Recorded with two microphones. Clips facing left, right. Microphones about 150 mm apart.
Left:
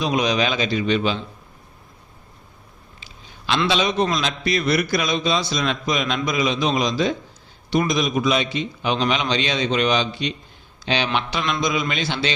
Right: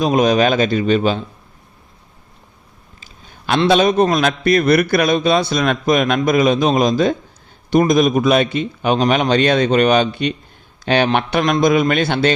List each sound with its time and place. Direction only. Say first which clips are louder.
0.0 s a man's voice: right 7 dB; 45° right (ahead or behind)
3.0 s a sound: right 3 dB; 50° right (ahead or behind)
3.7 s a man's voice: right 9 dB; 50° right (ahead or behind)